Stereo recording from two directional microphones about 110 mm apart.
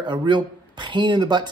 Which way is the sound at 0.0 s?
45° right (ahead or behind).